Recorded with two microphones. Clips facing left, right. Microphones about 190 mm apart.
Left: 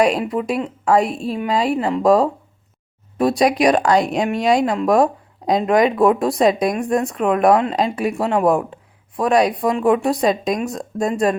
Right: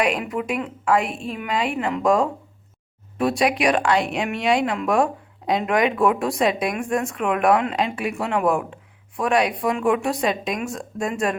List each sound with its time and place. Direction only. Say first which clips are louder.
0.0 s speech: left 5 dB; 35° left (ahead or behind)